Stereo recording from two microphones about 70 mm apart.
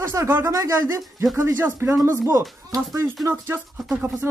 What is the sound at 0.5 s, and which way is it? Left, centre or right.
Speech, right.